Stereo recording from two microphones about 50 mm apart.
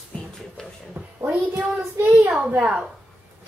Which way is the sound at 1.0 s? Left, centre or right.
Right.